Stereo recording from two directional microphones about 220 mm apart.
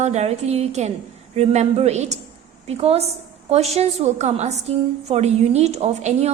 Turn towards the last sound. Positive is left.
turn(degrees=-30)  # may be behind; listen again after turning